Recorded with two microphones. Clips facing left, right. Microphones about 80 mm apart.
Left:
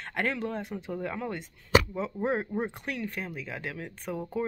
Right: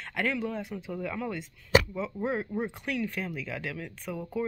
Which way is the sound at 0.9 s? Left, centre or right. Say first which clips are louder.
Even; left.